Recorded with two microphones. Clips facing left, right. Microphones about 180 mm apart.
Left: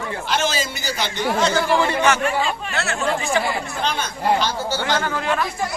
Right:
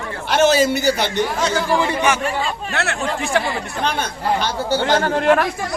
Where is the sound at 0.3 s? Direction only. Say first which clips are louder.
Right 10 dB; 60° right (ahead or behind).